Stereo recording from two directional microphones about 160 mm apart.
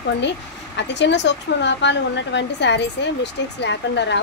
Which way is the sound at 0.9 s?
90° left.